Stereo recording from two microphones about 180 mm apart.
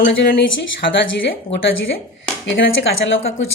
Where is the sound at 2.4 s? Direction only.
90° left.